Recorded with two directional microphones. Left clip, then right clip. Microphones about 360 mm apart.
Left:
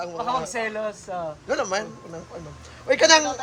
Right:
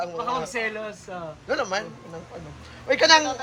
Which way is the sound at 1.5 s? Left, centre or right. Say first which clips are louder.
Even; centre.